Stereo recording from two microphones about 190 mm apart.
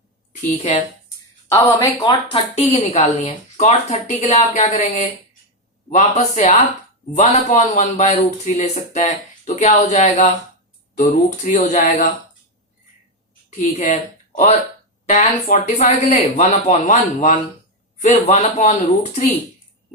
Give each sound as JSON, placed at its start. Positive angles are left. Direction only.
{"t": 0.5, "sound": "a man's voice", "side_deg": 35}
{"t": 1.5, "sound": "speech", "side_deg": 15}
{"t": 2.6, "sound": "a man's voice", "side_deg": 35}
{"t": 13.6, "sound": "a man's voice", "side_deg": 40}